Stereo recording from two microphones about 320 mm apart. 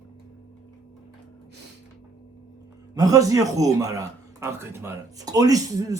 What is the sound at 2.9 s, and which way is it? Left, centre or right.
A man's voice, centre.